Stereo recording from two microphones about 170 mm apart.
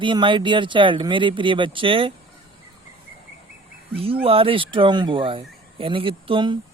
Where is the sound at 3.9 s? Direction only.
35° right (ahead or behind).